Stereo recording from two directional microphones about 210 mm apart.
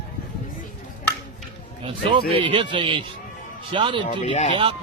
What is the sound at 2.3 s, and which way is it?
Speech, 25° right (ahead or behind).